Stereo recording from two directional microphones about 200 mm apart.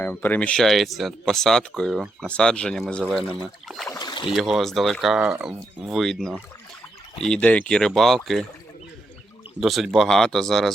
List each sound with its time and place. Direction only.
0.0 s speech: 10° left (ahead or behind)
3.7 s rowboat: centre (ahead or behind)
3.9 s rowboat: 20° left (ahead or behind)
4.4 s speech: centre (ahead or behind)
9.6 s speech: centre (ahead or behind)